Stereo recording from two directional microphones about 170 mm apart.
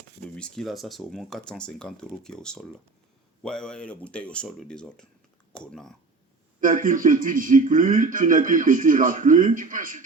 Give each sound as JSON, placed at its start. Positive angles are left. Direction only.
{"t": 0.3, "sound": "speech", "side_deg": 5}
{"t": 6.6, "sound": "speech", "side_deg": -50}